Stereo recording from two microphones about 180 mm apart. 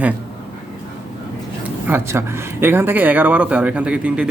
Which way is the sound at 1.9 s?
15° right (ahead or behind).